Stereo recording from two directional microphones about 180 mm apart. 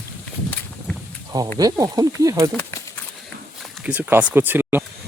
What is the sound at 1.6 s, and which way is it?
Speech, 20° right (ahead or behind).